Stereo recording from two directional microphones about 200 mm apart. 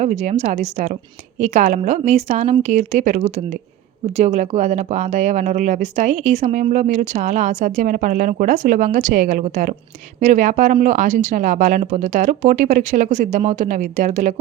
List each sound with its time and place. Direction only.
0.0 s speech: 35° right (ahead or behind)